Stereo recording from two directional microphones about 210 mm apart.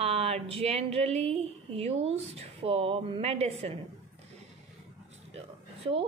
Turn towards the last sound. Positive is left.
turn(degrees=-30)  # may be behind; listen again after turning